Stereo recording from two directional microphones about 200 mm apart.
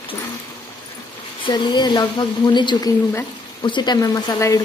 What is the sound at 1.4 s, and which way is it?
Speech, 20° left (ahead or behind).